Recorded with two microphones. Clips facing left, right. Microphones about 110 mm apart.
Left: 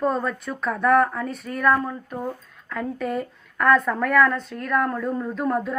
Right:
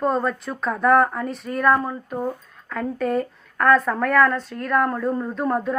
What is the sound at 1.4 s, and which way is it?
Speech, centre (ahead or behind).